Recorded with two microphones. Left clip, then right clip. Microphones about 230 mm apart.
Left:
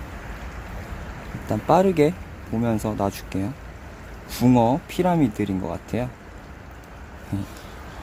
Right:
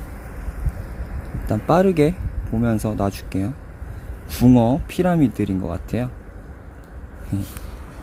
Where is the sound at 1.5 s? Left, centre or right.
Centre.